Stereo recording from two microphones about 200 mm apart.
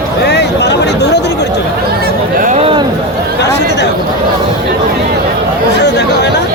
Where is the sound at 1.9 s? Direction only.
45° right (ahead or behind); by 2.8 s 30° right (ahead or behind).